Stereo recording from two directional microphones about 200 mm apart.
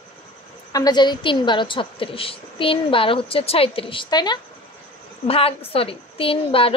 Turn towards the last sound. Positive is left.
turn(degrees=25)  # may be behind; listen again after turning